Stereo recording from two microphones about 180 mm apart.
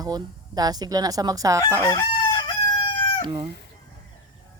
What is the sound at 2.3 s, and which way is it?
Crowing, 25° left (ahead or behind).